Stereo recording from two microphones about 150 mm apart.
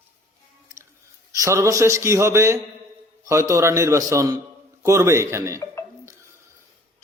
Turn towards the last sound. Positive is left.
turn(degrees=-15)  # may be behind; listen again after turning